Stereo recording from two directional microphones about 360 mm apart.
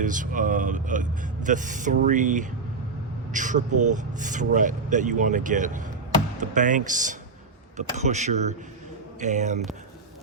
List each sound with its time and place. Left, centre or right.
0.0 s speech: right